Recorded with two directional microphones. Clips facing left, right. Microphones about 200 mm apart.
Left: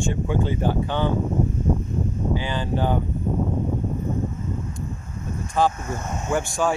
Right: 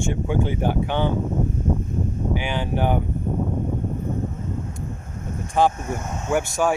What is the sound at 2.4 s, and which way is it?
Speech, 15° right (ahead or behind).